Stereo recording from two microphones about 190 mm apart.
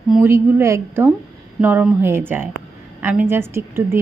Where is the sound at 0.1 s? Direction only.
10° right (ahead or behind).